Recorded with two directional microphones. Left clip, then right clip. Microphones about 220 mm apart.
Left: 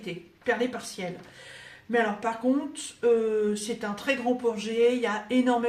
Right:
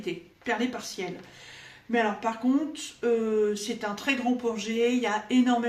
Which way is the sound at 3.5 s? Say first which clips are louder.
Even; 15° right (ahead or behind).